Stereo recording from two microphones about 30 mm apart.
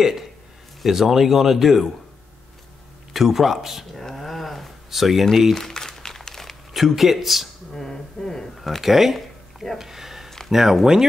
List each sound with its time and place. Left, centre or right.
0.8 s speech: centre
3.1 s speech: centre
3.9 s a sound: centre
5.5 s speech: centre
5.9 s crumpling: centre
6.7 s speech: centre
7.7 s speech: centre
8.8 s a sound: centre
10.5 s speech: centre